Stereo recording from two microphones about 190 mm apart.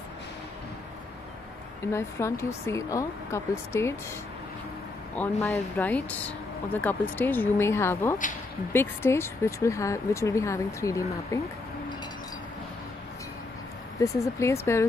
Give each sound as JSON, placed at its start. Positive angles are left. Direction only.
{"t": 1.9, "sound": "speech", "side_deg": 15}
{"t": 5.1, "sound": "speech", "side_deg": 5}
{"t": 13.9, "sound": "speech", "side_deg": 15}